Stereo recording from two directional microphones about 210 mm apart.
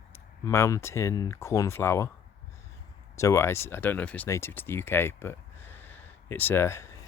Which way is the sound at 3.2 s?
15° left (ahead or behind).